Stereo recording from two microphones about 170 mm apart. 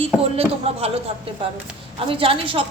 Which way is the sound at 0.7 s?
35° right (ahead or behind).